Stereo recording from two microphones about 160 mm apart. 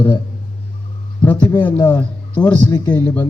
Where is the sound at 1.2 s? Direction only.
10° left (ahead or behind).